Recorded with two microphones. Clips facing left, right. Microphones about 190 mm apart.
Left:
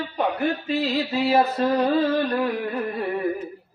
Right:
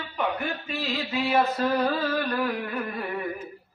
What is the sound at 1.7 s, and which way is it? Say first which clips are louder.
Music: left 5 dB; 20° left (ahead or behind).